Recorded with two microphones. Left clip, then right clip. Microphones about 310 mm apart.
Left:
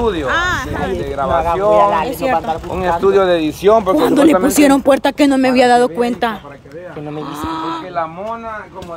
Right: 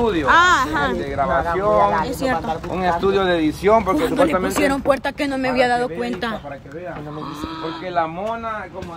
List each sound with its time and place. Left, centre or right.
0.0 s speech: left
0.3 s speech: centre
1.1 s speech: left
3.0 s speech: left
7.4 s speech: centre